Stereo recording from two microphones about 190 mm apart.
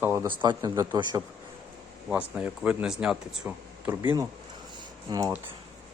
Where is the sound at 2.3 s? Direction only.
5° right (ahead or behind).